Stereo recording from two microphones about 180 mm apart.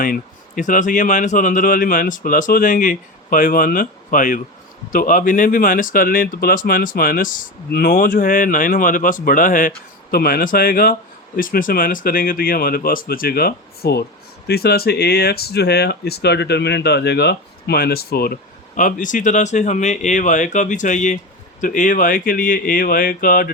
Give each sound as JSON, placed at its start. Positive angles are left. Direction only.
{"t": 0.0, "sound": "speech", "side_deg": 50}